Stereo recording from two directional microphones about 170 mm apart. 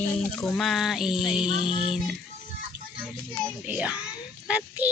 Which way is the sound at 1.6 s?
30° left (ahead or behind).